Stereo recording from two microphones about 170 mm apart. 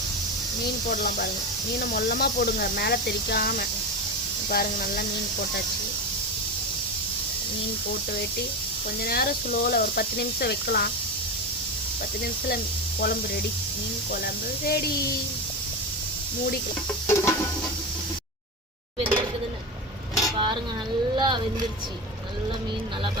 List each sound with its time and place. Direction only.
0.9 s speech: 55° left (ahead or behind)
9.0 s speech: 65° left (ahead or behind)
14.6 s speech: 65° left (ahead or behind)
17.1 s music: 15° left (ahead or behind)
18.9 s a sound: 30° right (ahead or behind)
20.3 s dishes: 30° right (ahead or behind)
21.2 s a sound: 25° right (ahead or behind)